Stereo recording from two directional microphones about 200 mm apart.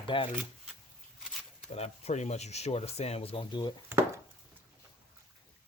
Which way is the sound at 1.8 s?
30° left (ahead or behind).